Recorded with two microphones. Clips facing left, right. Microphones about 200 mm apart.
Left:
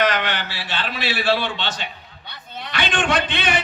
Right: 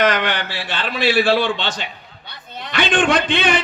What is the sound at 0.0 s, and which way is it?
A man's voice, 50° right (ahead or behind).